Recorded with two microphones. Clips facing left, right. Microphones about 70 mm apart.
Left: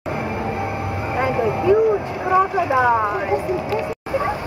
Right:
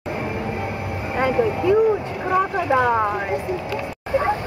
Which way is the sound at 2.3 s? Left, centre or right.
Centre.